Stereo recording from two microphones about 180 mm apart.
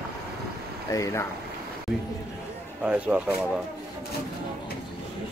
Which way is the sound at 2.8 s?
5° right (ahead or behind).